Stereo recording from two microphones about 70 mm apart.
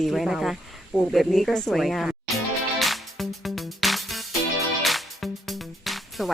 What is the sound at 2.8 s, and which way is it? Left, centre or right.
Music, centre.